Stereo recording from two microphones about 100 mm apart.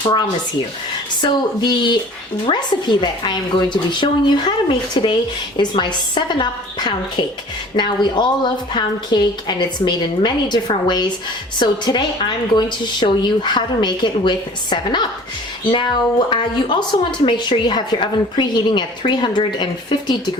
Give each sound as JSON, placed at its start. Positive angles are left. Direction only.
{"t": 0.0, "sound": "a woman's voice", "side_deg": 45}